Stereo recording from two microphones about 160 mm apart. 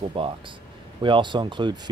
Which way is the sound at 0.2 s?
35° right (ahead or behind).